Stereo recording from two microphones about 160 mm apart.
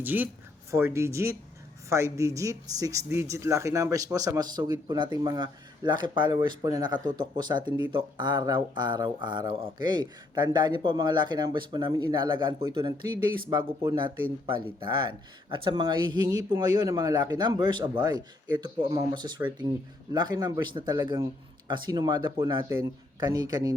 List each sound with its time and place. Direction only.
0.0 s a man's voice: 10° right (ahead or behind)